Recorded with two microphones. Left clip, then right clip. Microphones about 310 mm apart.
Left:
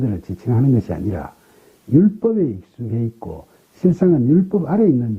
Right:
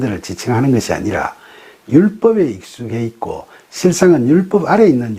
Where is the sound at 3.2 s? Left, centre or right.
Right.